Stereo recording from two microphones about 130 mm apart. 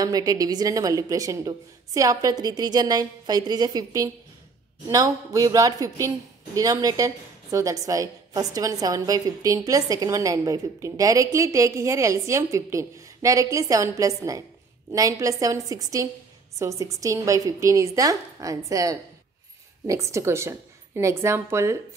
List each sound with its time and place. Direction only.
0.0 s a woman's voice: 25° right (ahead or behind)